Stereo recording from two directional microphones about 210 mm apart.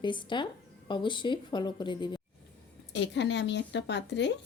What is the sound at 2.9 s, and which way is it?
Speech, 55° left (ahead or behind).